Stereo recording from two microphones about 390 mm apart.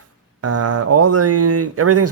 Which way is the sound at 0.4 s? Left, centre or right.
Right.